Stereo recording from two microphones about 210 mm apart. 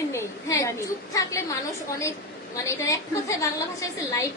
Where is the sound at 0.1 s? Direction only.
15° left (ahead or behind).